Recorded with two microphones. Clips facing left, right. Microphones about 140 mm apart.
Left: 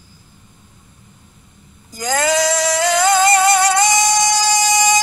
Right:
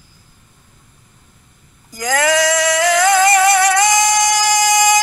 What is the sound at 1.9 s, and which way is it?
Singing, 25° left (ahead or behind).